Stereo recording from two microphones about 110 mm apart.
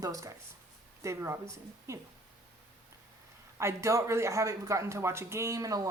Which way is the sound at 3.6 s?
25° right (ahead or behind).